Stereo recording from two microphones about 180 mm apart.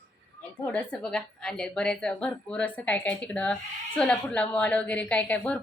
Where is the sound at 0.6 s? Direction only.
5° left (ahead or behind).